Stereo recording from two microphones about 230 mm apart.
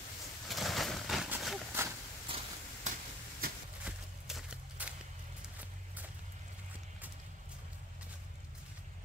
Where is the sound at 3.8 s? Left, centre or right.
Centre.